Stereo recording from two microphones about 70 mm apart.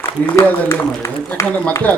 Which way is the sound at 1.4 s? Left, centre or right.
Left.